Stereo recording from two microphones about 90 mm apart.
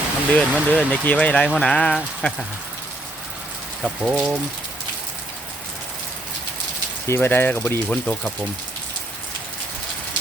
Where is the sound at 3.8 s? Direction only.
5° right (ahead or behind).